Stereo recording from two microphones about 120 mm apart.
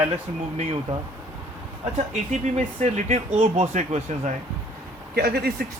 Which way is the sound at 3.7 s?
80° right.